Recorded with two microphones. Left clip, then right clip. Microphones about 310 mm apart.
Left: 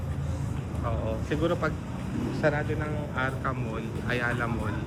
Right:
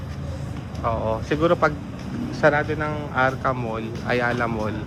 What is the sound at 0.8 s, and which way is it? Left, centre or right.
Speech, centre.